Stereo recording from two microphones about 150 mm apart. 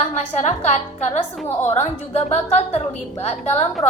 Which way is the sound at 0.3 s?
45° left (ahead or behind).